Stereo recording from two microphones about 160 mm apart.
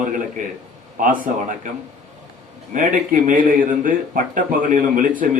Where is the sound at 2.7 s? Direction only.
55° right (ahead or behind).